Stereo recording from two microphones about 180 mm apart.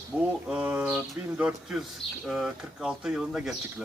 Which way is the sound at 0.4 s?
5° right (ahead or behind).